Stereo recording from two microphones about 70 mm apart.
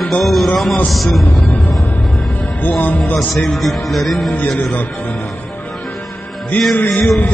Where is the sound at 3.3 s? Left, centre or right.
Centre.